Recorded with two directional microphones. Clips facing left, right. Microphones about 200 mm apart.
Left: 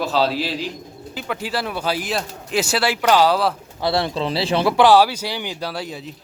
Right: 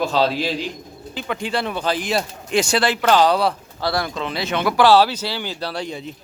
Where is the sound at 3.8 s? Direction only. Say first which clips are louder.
Left 3 dB; 25° left (ahead or behind).